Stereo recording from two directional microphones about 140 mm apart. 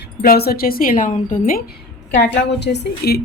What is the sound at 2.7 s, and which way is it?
Speech, 90° left.